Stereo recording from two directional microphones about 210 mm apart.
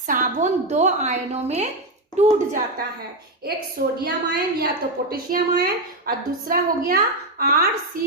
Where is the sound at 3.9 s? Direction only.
50° right (ahead or behind).